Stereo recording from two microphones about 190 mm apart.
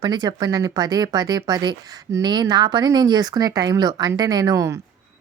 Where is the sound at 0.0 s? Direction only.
20° right (ahead or behind).